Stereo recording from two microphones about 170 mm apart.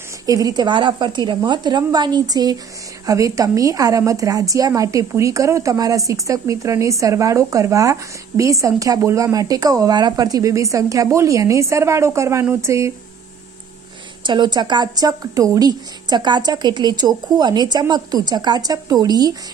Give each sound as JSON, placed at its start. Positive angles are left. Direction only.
{"t": 0.3, "sound": "a woman's voice", "side_deg": -20}
{"t": 14.2, "sound": "a woman's voice", "side_deg": -25}